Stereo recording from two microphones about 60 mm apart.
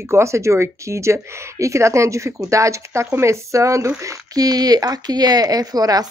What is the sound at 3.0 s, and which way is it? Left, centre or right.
Speech, right.